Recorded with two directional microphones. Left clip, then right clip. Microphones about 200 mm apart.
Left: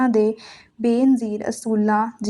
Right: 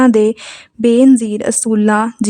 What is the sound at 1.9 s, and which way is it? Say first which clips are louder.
Speech: right 5 dB; 55° right (ahead or behind).